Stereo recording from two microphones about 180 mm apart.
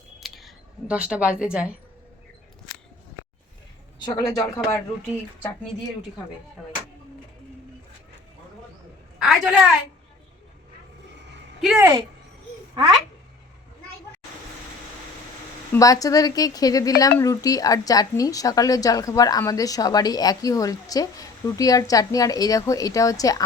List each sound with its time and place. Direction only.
0.2 s a sound: centre (ahead or behind)
4.0 s a woman's voice: 20° left (ahead or behind)
9.1 s a woman's voice: centre (ahead or behind)
11.6 s speech: 10° right (ahead or behind)
15.7 s a woman's voice: 20° left (ahead or behind)